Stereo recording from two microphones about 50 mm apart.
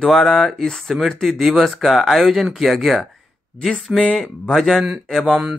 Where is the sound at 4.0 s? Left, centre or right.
Centre.